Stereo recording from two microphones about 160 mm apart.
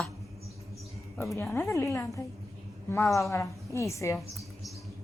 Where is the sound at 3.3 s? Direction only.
20° left (ahead or behind).